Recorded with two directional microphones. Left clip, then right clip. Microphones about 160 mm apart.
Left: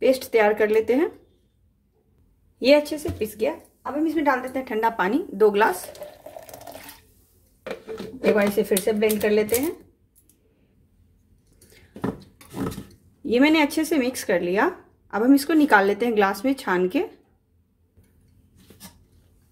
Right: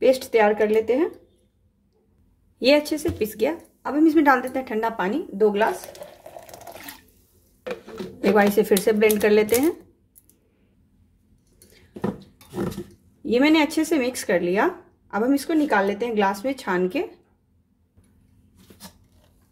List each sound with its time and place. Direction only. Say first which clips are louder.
0.0 s speech: right 1 dB; 5° right (ahead or behind)
2.6 s a woman's voice: left 1 dB; 10° right (ahead or behind)
3.2 s speech: even; 25° right (ahead or behind)
3.8 s a woman's voice: right 5 dB; 40° right (ahead or behind); by 4.6 s 20° right (ahead or behind)
4.6 s speech: left 2 dB; centre (ahead or behind)
4.9 s speech: left 2 dB; 15° left (ahead or behind)
5.9 s stir: left 1 dB; centre (ahead or behind)
7.6 s a sound: right 1 dB; centre (ahead or behind)
8.4 s a woman's voice: right 3 dB; 30° right (ahead or behind)
11.7 s a sound: right 1 dB; centre (ahead or behind)
13.2 s speech: even; centre (ahead or behind); by 17.2 s 15° left (ahead or behind)